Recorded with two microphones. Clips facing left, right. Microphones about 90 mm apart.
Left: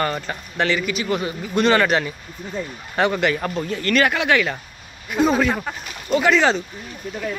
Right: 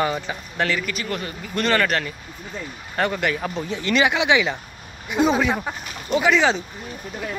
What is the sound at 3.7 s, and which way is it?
Speech, 15° right (ahead or behind).